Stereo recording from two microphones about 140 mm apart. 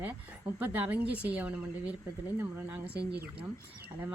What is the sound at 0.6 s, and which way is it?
A woman's voice, 10° right (ahead or behind).